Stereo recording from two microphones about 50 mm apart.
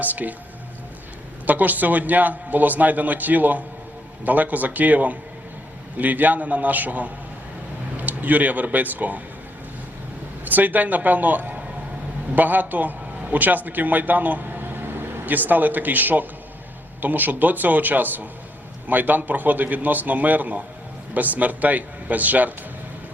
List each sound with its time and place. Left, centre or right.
0.0 s a man's voice: right
1.5 s a man's voice: right
10.4 s a man's voice: right